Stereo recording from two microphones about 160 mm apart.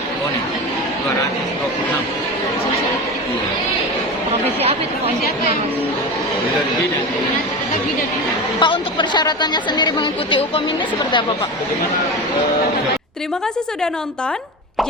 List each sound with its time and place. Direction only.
8.5 s speech: 30° left (ahead or behind)